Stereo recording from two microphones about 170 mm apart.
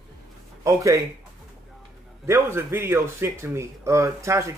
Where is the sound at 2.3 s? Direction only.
15° right (ahead or behind).